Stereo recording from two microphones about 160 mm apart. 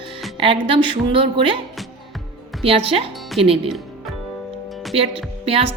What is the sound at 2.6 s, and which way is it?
A woman's voice, 35° right (ahead or behind).